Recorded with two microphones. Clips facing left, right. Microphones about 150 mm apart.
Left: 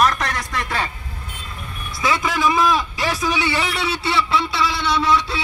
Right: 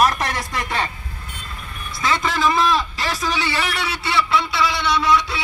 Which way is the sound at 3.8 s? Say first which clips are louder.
Left 1 dB; 30° left (ahead or behind).